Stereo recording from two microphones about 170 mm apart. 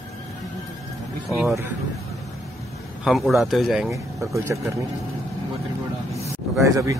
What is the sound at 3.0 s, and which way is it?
Speech, centre (ahead or behind).